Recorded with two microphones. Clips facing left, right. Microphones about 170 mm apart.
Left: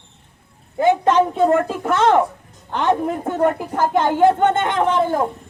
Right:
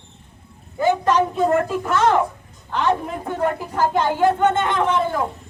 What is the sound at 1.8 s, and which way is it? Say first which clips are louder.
Speech: left 2 dB; 25° left (ahead or behind).